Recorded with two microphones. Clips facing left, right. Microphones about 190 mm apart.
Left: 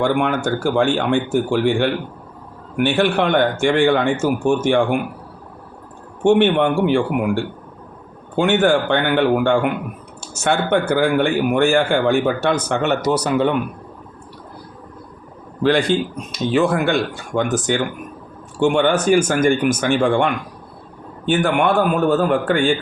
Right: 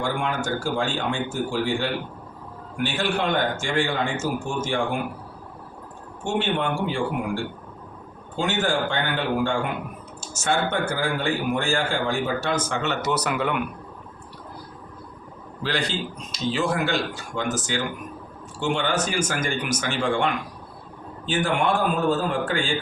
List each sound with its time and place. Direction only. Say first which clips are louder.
0.0 s speech: left 8 dB; 65° left (ahead or behind)
6.2 s speech: left 11 dB; 65° left (ahead or behind)
8.4 s speech: left 9 dB; 65° left (ahead or behind)
13.0 s speech: left 7 dB; 35° left (ahead or behind)
15.6 s speech: left 11 dB; 55° left (ahead or behind)